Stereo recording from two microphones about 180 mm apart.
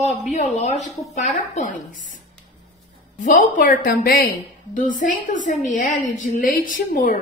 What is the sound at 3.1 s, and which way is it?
A woman's voice, 45° left (ahead or behind).